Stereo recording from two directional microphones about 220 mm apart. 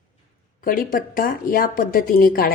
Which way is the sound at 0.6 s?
40° left (ahead or behind).